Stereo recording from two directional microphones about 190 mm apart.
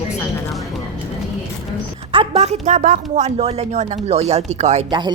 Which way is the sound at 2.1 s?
35° right (ahead or behind).